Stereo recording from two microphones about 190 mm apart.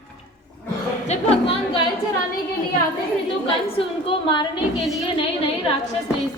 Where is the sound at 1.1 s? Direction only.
30° left (ahead or behind).